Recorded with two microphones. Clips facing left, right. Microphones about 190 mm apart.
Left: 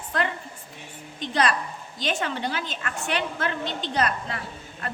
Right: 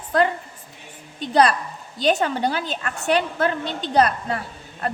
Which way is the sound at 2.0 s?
40° right (ahead or behind).